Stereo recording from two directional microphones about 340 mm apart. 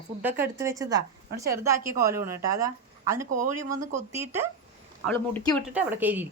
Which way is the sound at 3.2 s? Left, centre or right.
Right.